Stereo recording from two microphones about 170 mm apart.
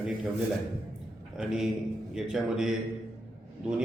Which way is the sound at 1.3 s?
5° right (ahead or behind).